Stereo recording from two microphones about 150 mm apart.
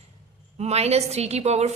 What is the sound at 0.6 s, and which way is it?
A woman's voice, 45° right (ahead or behind).